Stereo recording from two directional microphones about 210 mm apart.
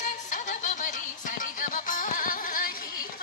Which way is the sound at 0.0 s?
35° left (ahead or behind).